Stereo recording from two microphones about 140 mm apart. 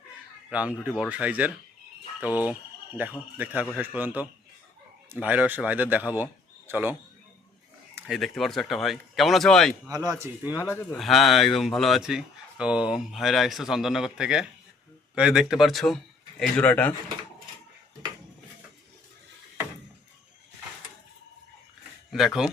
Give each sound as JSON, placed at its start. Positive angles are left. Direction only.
{"t": 0.5, "sound": "speech", "side_deg": -10}
{"t": 8.0, "sound": "speech", "side_deg": 0}
{"t": 9.9, "sound": "speech", "side_deg": -25}
{"t": 10.6, "sound": "speech", "side_deg": 20}
{"t": 10.9, "sound": "speech", "side_deg": 0}
{"t": 22.1, "sound": "speech", "side_deg": 0}